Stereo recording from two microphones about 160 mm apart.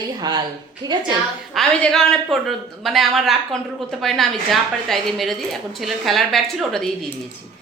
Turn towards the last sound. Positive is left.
turn(degrees=0)  # may be behind; listen again after turning